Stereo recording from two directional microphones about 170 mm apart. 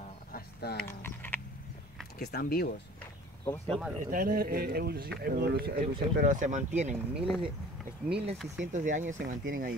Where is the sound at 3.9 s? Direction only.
55° right (ahead or behind).